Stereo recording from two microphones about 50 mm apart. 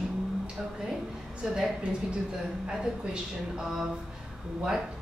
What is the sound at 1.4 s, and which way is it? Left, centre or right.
Speech, centre.